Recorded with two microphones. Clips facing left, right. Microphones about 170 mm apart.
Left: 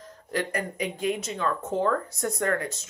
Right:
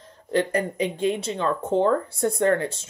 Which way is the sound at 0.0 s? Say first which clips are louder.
Right 6 dB; 30° right (ahead or behind).